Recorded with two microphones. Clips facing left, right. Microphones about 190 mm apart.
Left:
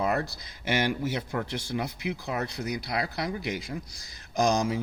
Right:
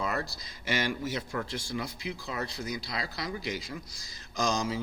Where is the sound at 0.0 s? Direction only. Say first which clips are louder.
Left 5 dB; 55° left (ahead or behind).